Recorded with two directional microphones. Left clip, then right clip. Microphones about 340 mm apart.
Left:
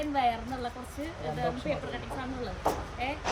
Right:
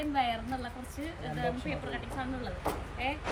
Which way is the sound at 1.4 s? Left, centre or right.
Centre.